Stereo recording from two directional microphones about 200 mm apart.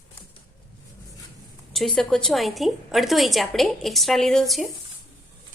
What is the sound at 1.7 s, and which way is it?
A woman's voice, centre (ahead or behind).